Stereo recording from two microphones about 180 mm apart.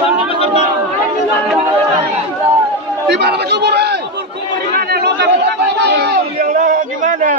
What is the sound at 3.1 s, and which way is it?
Speech, 70° right (ahead or behind).